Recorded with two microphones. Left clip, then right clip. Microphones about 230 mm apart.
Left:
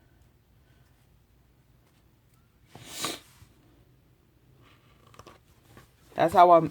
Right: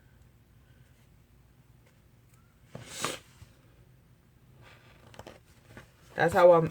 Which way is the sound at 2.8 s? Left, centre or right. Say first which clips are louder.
Left 1 dB; left.